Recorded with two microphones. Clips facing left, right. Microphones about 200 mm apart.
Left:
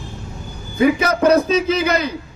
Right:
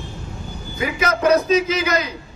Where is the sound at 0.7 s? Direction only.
30° left (ahead or behind).